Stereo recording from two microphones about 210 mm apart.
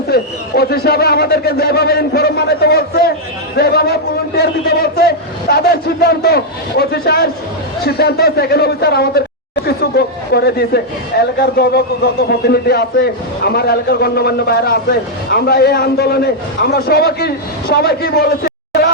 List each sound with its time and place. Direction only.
0.1 s a man's voice: 50° left (ahead or behind)